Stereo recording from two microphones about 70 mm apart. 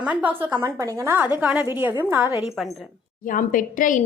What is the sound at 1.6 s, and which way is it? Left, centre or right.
Speech, right.